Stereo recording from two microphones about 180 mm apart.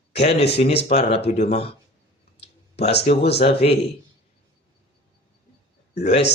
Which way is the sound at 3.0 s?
35° left (ahead or behind).